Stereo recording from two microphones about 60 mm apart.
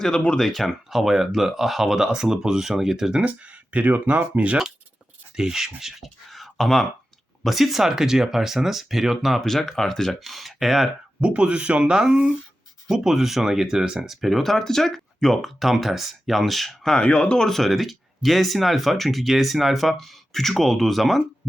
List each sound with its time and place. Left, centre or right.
0.3 s speech: centre
3.2 s speech: right
5.4 s speech: centre
11.2 s speech: centre
17.0 s speech: centre